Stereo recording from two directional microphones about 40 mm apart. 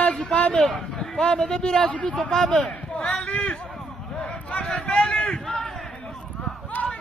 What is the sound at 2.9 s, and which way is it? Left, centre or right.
Run, centre.